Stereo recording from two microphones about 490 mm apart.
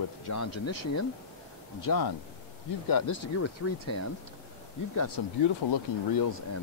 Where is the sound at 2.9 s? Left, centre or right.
Left.